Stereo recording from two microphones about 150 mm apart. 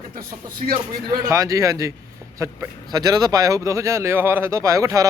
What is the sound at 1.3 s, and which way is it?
Speech, 20° right (ahead or behind).